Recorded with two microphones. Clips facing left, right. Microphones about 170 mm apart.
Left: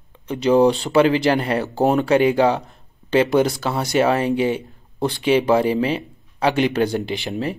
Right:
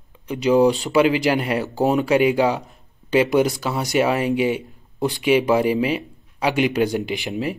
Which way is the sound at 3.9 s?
40° left (ahead or behind).